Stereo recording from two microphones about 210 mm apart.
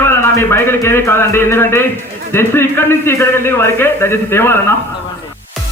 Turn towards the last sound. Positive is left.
turn(degrees=10)  # may be behind; listen again after turning